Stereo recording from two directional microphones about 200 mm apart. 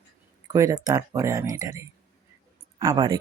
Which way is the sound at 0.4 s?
15° right (ahead or behind).